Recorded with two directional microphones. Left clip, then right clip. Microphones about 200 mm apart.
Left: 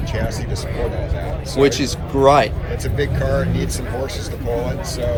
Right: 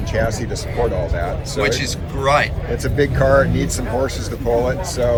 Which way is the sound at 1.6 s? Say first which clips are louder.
Left 3 dB; 15° left (ahead or behind).